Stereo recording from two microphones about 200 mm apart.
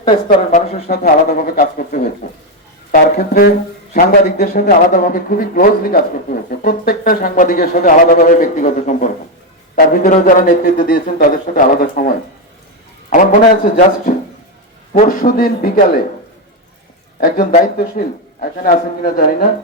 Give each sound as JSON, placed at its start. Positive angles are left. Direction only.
{"t": 0.9, "sound": "speech", "side_deg": 45}
{"t": 2.2, "sound": "a sound", "side_deg": 40}
{"t": 2.9, "sound": "speech", "side_deg": 45}
{"t": 17.2, "sound": "speech", "side_deg": 45}